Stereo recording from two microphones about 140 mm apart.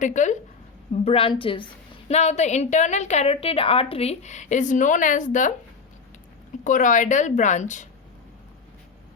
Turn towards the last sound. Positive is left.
turn(degrees=60)  # may be behind; listen again after turning